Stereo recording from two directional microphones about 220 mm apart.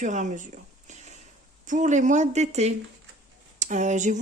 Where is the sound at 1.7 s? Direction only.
35° right (ahead or behind).